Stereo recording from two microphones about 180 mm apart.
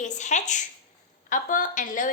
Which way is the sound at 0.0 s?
40° left (ahead or behind).